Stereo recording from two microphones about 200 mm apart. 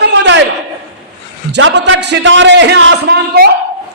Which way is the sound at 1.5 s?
65° right (ahead or behind).